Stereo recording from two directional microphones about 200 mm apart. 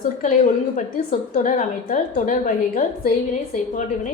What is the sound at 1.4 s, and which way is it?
A woman's voice, 40° left (ahead or behind).